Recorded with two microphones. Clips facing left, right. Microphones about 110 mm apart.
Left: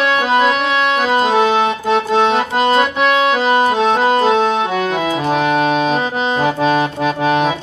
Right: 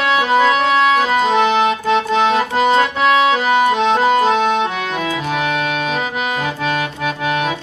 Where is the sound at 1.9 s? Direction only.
30° left (ahead or behind).